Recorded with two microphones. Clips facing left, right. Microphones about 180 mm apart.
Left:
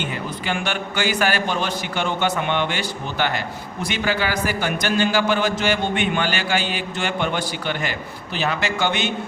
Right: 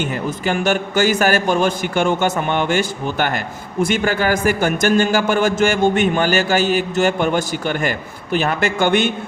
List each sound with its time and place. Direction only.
0.0 s a man's voice: 45° right (ahead or behind)